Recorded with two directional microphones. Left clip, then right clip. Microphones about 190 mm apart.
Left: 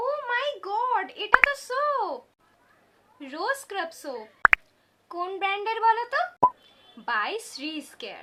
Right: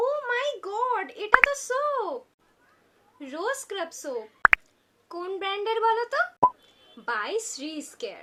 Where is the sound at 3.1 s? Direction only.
10° left (ahead or behind).